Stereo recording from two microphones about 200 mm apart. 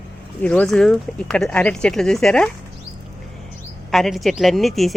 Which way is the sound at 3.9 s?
Centre (ahead or behind).